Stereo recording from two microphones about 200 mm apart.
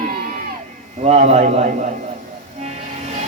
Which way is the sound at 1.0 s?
35° right (ahead or behind).